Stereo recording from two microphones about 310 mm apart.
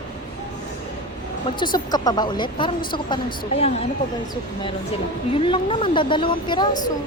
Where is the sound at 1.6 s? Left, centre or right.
Centre.